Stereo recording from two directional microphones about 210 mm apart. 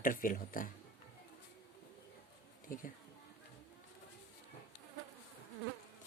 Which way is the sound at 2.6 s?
40° left (ahead or behind).